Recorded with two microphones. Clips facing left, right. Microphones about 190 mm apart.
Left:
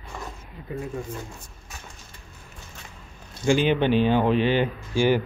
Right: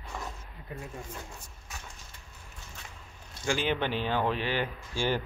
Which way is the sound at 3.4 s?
15° left (ahead or behind).